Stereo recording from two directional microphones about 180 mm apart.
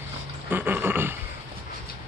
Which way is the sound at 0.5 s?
10° right (ahead or behind).